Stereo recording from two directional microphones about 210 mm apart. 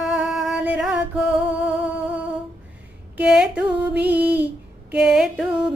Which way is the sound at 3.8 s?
5° right (ahead or behind).